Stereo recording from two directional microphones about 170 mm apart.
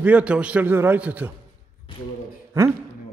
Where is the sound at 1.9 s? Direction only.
30° left (ahead or behind).